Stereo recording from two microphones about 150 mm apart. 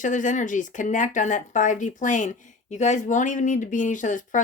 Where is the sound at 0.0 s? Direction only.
60° left (ahead or behind).